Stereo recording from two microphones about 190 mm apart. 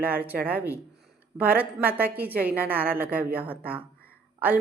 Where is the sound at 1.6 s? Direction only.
10° right (ahead or behind).